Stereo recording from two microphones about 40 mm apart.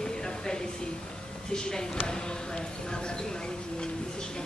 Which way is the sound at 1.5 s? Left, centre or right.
Centre.